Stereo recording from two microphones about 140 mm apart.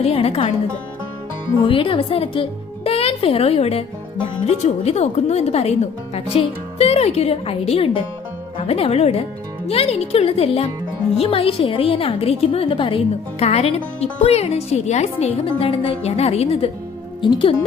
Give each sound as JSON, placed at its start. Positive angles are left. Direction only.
{"t": 0.0, "sound": "speech", "side_deg": 45}
{"t": 1.6, "sound": "a woman's voice", "side_deg": 40}
{"t": 17.2, "sound": "a woman's voice", "side_deg": 35}